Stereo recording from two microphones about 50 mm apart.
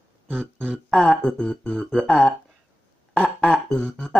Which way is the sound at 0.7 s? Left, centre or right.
Centre.